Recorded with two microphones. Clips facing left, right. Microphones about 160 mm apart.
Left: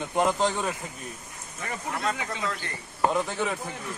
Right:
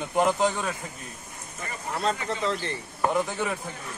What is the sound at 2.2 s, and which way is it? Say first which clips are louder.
Chop: right 4 dB; 25° right (ahead or behind).